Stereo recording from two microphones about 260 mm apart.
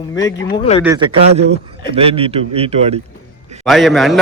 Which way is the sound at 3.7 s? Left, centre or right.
Centre.